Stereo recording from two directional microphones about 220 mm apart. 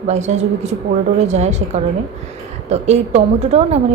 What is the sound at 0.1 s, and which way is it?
A woman's voice, 30° right (ahead or behind).